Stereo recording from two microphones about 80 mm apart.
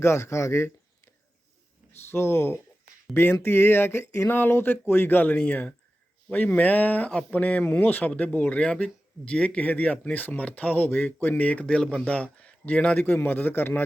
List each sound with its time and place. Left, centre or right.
0.0 s a man's voice: left